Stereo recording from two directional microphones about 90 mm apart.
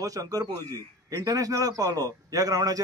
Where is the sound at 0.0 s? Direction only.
40° right (ahead or behind).